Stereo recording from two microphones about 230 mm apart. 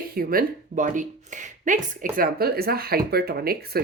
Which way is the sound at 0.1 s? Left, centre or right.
Right.